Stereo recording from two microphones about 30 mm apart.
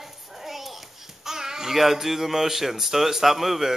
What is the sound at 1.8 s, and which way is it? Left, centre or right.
Speech, centre.